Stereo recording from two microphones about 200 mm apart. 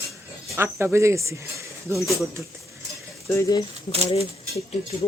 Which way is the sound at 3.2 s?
15° left (ahead or behind).